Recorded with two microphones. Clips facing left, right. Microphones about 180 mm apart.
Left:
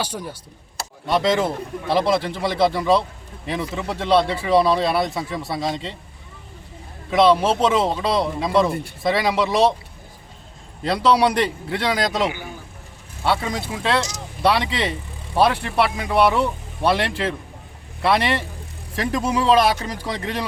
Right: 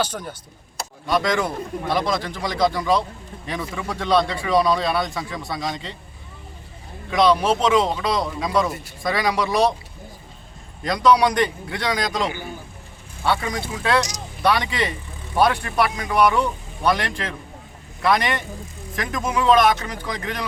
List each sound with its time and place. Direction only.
0.0 s speech: 10° left (ahead or behind)
1.0 s speech: 25° left (ahead or behind)
7.1 s speech: 25° left (ahead or behind)
10.8 s speech: 30° left (ahead or behind)
13.2 s speech: 25° left (ahead or behind)